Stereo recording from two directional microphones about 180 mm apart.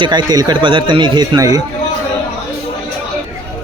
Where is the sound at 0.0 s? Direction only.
25° right (ahead or behind).